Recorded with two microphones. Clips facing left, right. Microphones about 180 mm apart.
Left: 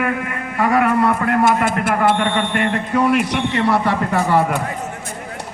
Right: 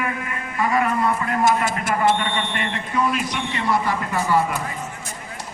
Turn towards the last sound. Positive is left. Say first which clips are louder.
# left 4 dB
turn(degrees=65)  # may be behind; listen again after turning